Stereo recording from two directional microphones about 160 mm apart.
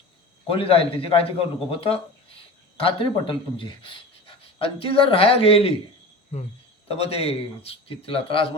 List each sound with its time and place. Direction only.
0.4 s a man's voice: 35° left (ahead or behind)
6.9 s a man's voice: 40° left (ahead or behind)